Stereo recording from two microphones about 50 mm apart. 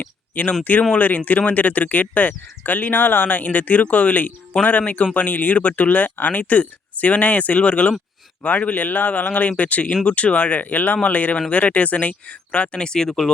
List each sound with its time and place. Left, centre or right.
0.0 s a sound: left
0.6 s speech: left
9.9 s speech: centre
10.2 s speech: left; by 13.3 s centre